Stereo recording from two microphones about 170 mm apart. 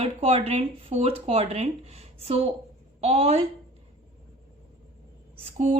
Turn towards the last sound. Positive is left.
turn(degrees=-40)  # may be behind; listen again after turning